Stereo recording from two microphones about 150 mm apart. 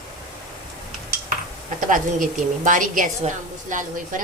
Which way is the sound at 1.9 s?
60° right (ahead or behind).